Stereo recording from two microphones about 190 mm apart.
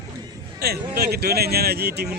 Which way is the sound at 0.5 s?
55° right (ahead or behind).